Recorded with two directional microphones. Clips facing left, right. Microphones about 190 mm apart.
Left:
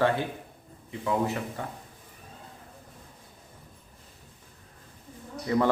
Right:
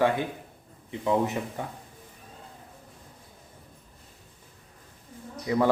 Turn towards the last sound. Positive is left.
turn(degrees=-15)  # may be behind; listen again after turning